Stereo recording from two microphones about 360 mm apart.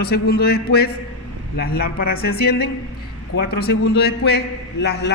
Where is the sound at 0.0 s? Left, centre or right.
Left.